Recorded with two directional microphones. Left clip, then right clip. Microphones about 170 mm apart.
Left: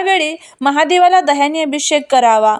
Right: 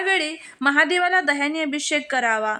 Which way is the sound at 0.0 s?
20° left (ahead or behind).